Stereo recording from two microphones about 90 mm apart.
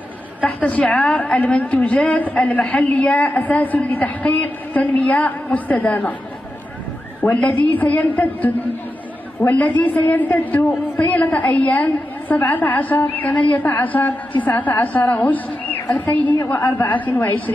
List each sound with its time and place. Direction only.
0.4 s a woman's voice: 15° left (ahead or behind)
7.2 s a woman's voice: 20° left (ahead or behind)